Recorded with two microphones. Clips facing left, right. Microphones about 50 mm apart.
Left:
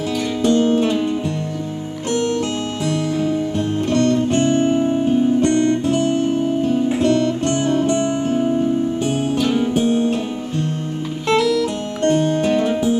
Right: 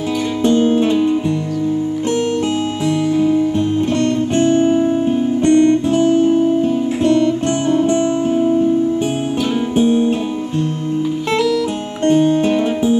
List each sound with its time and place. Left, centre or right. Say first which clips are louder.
0.5 s music: right 2 dB; right
2.0 s music: left 1 dB; centre
4.4 s music: right 7 dB; right
5.4 s guitar: right 5 dB; right
9.8 s music: right 8 dB; right
12.4 s music: right 2 dB; right